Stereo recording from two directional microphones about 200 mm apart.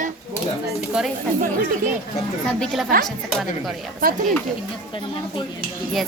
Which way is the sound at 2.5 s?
Centre (ahead or behind).